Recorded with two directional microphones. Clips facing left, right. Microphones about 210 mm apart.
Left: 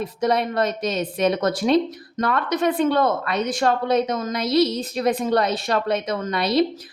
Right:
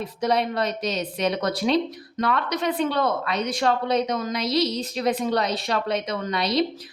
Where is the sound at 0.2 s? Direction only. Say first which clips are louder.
Left 2 dB; 50° left (ahead or behind).